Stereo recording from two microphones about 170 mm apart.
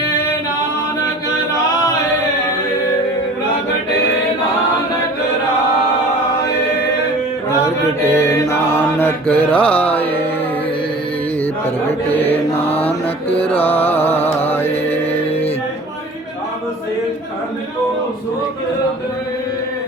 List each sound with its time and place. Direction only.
8.0 s mantra: 15° left (ahead or behind)
9.8 s music: 10° left (ahead or behind)
12.2 s mantra: 10° left (ahead or behind)
12.6 s mantra: 35° left (ahead or behind)
13.5 s music: 10° left (ahead or behind)
14.4 s mantra: 15° left (ahead or behind)